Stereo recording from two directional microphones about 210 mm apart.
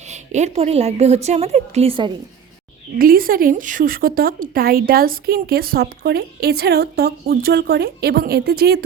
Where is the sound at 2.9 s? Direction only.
45° right (ahead or behind).